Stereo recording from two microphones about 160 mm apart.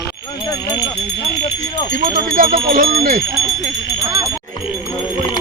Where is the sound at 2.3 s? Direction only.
60° right (ahead or behind).